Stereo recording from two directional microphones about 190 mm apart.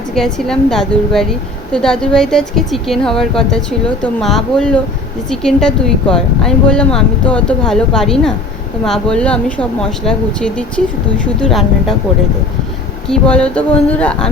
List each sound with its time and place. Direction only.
0.1 s a woman's voice: 5° left (ahead or behind)
13.1 s a woman's voice: 5° left (ahead or behind)